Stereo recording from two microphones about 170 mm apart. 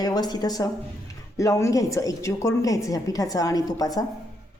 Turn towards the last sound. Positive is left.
turn(degrees=20)  # may be behind; listen again after turning